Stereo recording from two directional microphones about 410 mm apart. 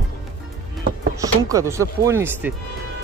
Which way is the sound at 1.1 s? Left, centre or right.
Centre.